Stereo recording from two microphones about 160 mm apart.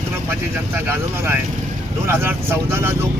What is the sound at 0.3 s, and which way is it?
Speech, 15° right (ahead or behind).